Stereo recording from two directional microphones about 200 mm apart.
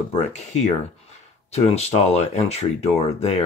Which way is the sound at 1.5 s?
30° left (ahead or behind).